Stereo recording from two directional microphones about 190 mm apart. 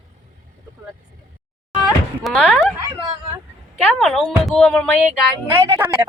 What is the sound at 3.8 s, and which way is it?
Speech, centre (ahead or behind).